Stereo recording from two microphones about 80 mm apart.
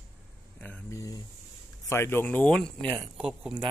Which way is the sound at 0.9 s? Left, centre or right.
Left.